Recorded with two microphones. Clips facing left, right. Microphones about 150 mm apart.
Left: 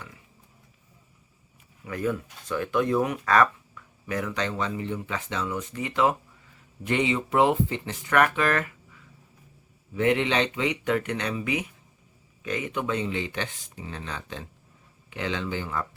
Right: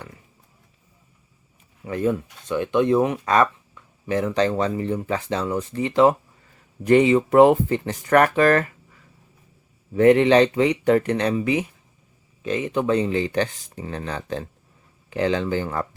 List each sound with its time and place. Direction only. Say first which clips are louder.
1.8 s speech: right 6 dB; 30° right (ahead or behind)
9.9 s speech: right 9 dB; 40° right (ahead or behind)